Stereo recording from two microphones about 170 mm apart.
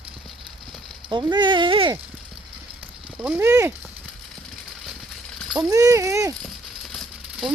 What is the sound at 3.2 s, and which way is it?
Speech, 10° right (ahead or behind).